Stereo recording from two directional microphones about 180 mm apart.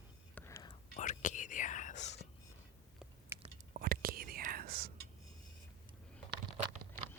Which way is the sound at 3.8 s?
55° right (ahead or behind).